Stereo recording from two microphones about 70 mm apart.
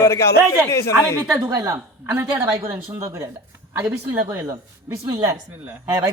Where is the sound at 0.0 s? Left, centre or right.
Left.